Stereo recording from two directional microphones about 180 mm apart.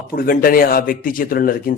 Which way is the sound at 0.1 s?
55° left (ahead or behind).